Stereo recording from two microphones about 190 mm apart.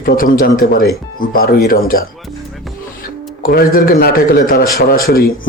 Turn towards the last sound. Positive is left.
turn(degrees=50)  # may be behind; listen again after turning